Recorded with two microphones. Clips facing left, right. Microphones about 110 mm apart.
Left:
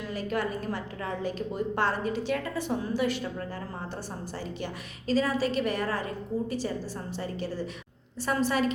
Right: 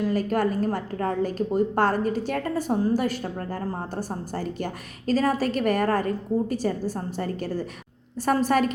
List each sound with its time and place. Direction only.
0.0 s a woman's voice: 45° right (ahead or behind)